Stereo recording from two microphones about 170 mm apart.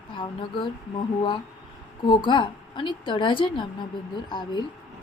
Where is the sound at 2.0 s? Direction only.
30° left (ahead or behind).